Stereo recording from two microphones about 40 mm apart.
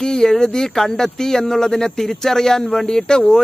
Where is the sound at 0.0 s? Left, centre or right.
Centre.